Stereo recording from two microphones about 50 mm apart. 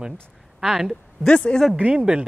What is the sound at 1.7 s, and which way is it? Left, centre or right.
Speech, right.